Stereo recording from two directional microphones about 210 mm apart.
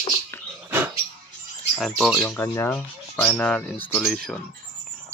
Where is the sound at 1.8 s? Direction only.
Centre (ahead or behind).